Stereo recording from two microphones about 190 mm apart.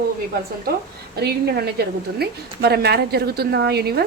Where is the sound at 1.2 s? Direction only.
55° right (ahead or behind).